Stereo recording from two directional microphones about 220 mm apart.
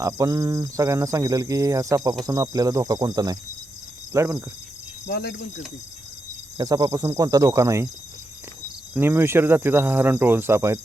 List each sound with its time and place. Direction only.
0.0 s speech: 15° right (ahead or behind)
5.0 s speech: 50° left (ahead or behind)
6.6 s speech: 15° right (ahead or behind)
9.0 s speech: 10° right (ahead or behind)